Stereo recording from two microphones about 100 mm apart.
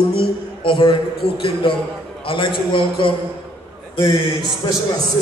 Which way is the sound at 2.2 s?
60° left (ahead or behind).